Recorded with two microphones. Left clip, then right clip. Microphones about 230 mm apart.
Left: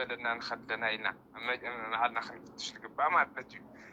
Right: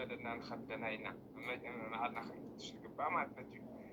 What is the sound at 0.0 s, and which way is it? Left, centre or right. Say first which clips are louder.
A man's voice: left 10 dB; left.